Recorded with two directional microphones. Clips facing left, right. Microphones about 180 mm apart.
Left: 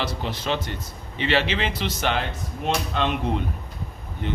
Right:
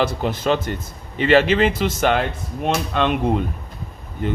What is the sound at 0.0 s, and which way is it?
Speech, 50° right (ahead or behind).